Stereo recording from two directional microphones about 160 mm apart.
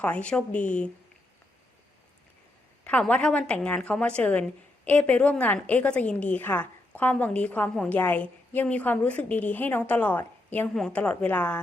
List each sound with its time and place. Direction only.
0.0 s a woman's voice: 10° left (ahead or behind)
0.5 s speech: 50° left (ahead or behind)
2.8 s a woman's voice: 10° left (ahead or behind)